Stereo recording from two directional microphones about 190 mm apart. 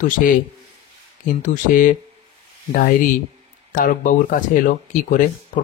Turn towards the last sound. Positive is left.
turn(degrees=45)  # may be behind; listen again after turning